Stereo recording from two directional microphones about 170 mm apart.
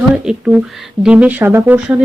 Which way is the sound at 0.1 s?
5° right (ahead or behind).